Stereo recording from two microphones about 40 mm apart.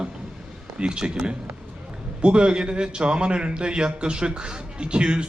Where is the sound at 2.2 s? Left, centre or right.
Right.